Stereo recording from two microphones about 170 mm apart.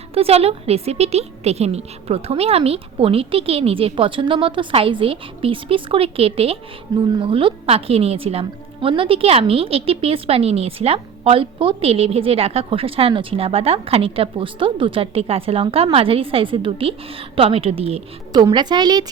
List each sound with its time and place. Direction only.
0.1 s a woman's voice: 35° right (ahead or behind)
18.3 s a woman's voice: 25° right (ahead or behind)